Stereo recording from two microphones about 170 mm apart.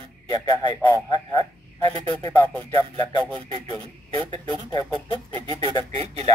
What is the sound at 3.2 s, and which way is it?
Speech, 30° right (ahead or behind).